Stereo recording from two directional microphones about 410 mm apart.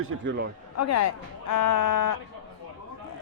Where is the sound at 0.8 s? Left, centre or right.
Left.